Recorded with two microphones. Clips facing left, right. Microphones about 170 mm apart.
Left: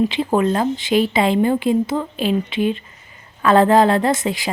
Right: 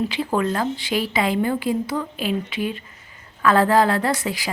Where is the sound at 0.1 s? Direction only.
20° left (ahead or behind).